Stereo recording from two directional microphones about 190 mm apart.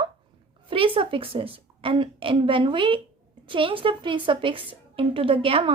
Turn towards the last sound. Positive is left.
turn(degrees=-30)  # may be behind; listen again after turning